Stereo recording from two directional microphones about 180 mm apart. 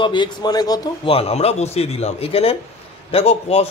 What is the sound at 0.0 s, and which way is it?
A man's voice, 25° left (ahead or behind).